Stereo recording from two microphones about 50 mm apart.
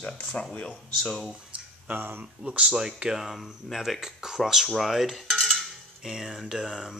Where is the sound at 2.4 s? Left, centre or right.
Right.